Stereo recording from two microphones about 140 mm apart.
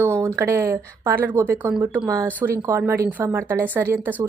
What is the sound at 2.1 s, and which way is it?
A woman's voice, 25° right (ahead or behind).